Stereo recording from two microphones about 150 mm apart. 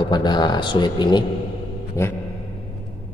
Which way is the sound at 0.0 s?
30° left (ahead or behind).